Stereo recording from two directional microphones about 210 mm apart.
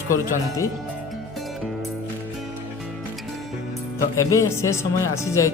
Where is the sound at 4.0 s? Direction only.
15° left (ahead or behind).